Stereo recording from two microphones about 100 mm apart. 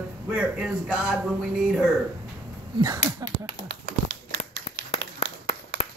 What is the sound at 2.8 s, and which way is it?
Speech, 35° right (ahead or behind).